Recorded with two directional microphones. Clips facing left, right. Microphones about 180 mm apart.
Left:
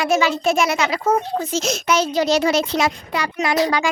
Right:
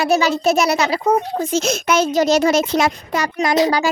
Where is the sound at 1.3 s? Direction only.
50° right (ahead or behind).